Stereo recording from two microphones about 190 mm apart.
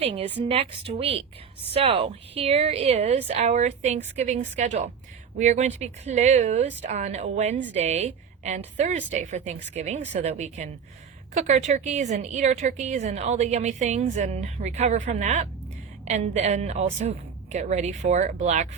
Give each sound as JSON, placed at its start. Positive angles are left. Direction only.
{"t": 0.0, "sound": "a woman's voice", "side_deg": -30}